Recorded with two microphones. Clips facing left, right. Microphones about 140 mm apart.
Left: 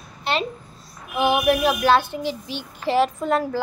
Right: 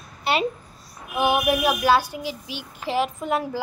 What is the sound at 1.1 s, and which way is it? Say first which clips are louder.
A child's voice: left 2 dB; 15° right (ahead or behind).